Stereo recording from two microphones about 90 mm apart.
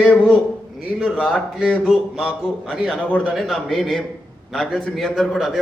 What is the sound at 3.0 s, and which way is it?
Speech, 15° left (ahead or behind).